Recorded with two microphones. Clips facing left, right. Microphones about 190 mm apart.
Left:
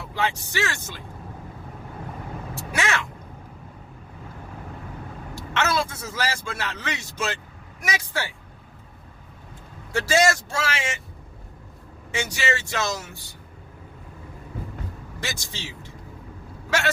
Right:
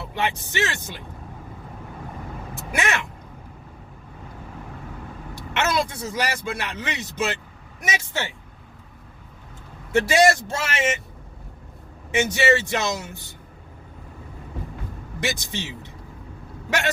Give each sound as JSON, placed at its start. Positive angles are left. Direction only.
{"t": 0.1, "sound": "speech", "side_deg": -20}
{"t": 2.6, "sound": "speech", "side_deg": -20}
{"t": 5.3, "sound": "a man's voice", "side_deg": -20}
{"t": 9.9, "sound": "speech", "side_deg": -20}
{"t": 12.1, "sound": "speech", "side_deg": -20}
{"t": 15.2, "sound": "speech", "side_deg": -20}